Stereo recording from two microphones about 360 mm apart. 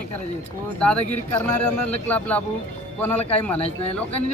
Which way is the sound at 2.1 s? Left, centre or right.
Centre.